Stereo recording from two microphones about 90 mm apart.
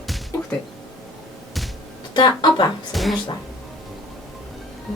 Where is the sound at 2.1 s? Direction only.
55° left (ahead or behind).